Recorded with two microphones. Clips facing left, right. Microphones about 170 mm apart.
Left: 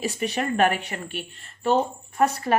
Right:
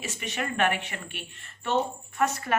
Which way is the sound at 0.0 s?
35° left (ahead or behind).